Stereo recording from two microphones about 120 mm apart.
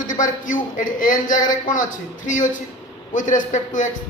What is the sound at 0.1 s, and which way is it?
Speech, 90° left.